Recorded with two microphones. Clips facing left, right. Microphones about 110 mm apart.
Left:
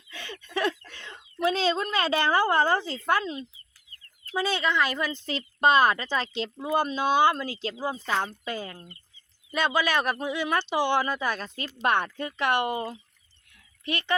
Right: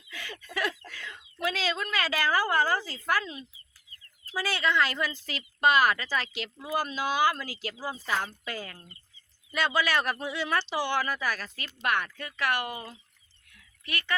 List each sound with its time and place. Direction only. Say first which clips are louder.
0.1 s fowl: left 1 dB; 25° left (ahead or behind)
0.4 s chicken: left 5 dB; 25° left (ahead or behind)
0.9 s speech: right 1 dB; 25° left (ahead or behind)